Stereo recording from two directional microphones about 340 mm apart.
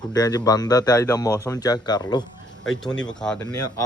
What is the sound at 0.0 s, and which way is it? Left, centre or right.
Speech, centre.